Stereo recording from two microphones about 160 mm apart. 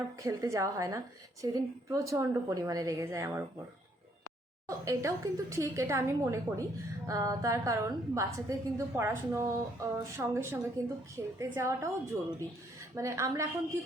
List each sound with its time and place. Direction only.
0.2 s a woman's voice: 20° right (ahead or behind)
4.9 s a woman's voice: 20° right (ahead or behind)